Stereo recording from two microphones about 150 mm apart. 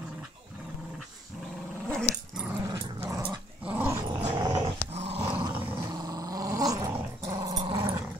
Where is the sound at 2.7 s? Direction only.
20° right (ahead or behind).